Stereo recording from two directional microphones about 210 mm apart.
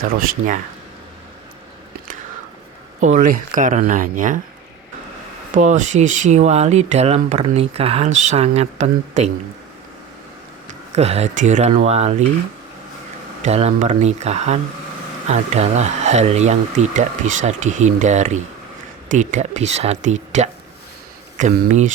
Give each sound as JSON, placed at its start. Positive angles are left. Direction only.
{"t": 3.0, "sound": "speech", "side_deg": -40}
{"t": 5.5, "sound": "speech", "side_deg": -35}
{"t": 10.7, "sound": "speech", "side_deg": -30}
{"t": 13.4, "sound": "speech", "side_deg": -30}